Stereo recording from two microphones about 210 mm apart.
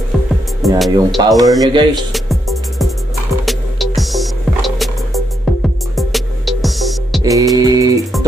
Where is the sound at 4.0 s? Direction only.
Centre (ahead or behind).